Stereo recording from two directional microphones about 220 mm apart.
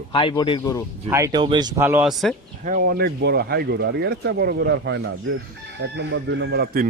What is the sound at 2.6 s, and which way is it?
Speech, 40° right (ahead or behind).